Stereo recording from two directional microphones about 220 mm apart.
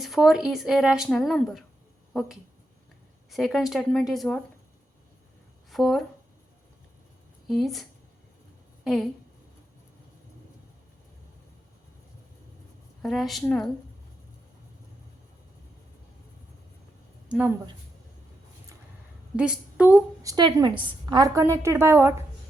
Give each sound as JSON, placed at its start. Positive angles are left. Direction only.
{"t": 0.0, "sound": "speech", "side_deg": 0}
{"t": 5.7, "sound": "speech", "side_deg": 0}
{"t": 7.4, "sound": "a woman's voice", "side_deg": 0}
{"t": 13.0, "sound": "speech", "side_deg": 0}
{"t": 17.2, "sound": "speech", "side_deg": -10}
{"t": 19.4, "sound": "a woman's voice", "side_deg": -5}
{"t": 20.3, "sound": "a woman's voice", "side_deg": -20}